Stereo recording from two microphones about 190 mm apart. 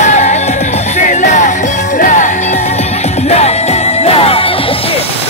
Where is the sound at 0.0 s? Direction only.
40° left (ahead or behind).